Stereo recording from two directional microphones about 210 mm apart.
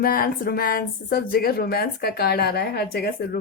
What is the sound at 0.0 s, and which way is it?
Speech, 45° left (ahead or behind).